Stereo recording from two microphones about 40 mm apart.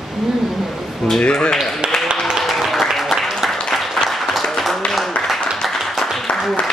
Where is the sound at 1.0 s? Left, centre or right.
Centre.